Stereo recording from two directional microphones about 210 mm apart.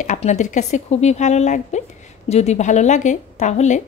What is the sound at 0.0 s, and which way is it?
A woman's voice, 35° left (ahead or behind).